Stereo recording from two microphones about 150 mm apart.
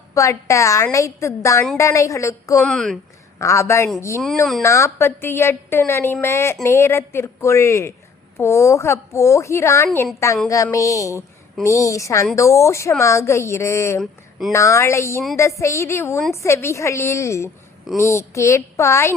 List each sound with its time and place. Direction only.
0.1 s a woman's voice: 20° left (ahead or behind)
2.6 s speech: 5° left (ahead or behind)
3.3 s a woman's voice: 20° left (ahead or behind)
14.0 s speech: centre (ahead or behind)
14.5 s a woman's voice: 20° left (ahead or behind)